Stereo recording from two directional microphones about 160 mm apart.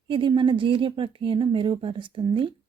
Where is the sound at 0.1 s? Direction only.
30° right (ahead or behind).